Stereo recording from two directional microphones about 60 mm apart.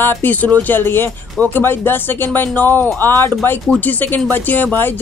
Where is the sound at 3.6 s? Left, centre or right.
Left.